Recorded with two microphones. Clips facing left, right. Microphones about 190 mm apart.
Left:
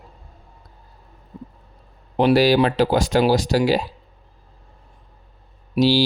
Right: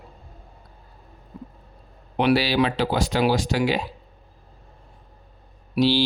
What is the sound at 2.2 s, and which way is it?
Speech, 40° left (ahead or behind).